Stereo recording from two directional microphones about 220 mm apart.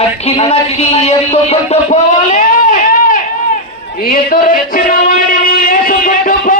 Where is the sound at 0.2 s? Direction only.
25° left (ahead or behind).